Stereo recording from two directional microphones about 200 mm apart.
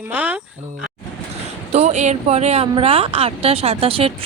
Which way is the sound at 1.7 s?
35° right (ahead or behind).